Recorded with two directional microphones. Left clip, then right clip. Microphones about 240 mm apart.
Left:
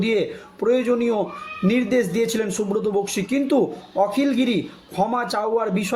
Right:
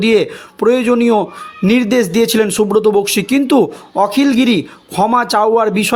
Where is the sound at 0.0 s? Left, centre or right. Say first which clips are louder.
Right 9 dB; right.